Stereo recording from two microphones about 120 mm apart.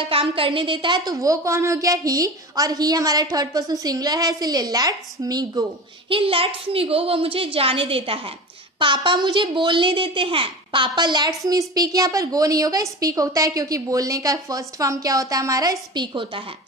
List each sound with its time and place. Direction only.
0.1 s a woman's voice: 50° right (ahead or behind)
1.1 s a child's voice: 25° right (ahead or behind)
6.0 s a woman's voice: 50° right (ahead or behind)